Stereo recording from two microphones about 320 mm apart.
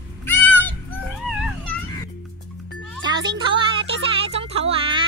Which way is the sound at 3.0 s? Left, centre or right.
Centre.